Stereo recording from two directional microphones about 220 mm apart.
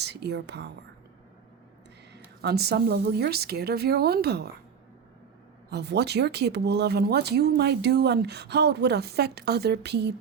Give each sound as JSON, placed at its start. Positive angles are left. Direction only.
{"t": 0.0, "sound": "speech", "side_deg": -50}
{"t": 2.4, "sound": "speech", "side_deg": -45}
{"t": 5.7, "sound": "speech", "side_deg": -50}